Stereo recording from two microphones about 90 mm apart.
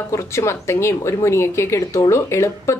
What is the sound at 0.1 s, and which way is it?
Speech, 35° left (ahead or behind).